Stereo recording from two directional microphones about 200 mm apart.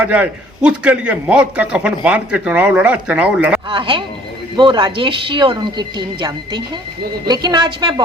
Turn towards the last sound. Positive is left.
turn(degrees=-20)  # may be behind; listen again after turning